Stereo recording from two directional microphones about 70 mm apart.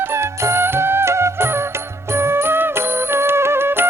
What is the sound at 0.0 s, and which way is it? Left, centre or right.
Music, right.